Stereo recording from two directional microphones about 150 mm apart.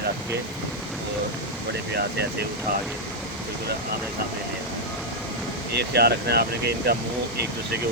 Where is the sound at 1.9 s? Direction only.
90° right.